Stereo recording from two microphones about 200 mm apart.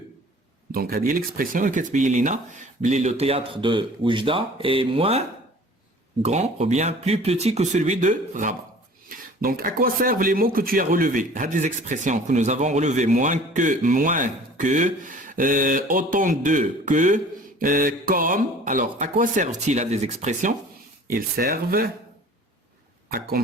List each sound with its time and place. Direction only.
0.7 s speech: 50° right (ahead or behind); by 5.2 s 30° right (ahead or behind)
6.2 s speech: 35° right (ahead or behind)
23.0 s speech: 50° right (ahead or behind)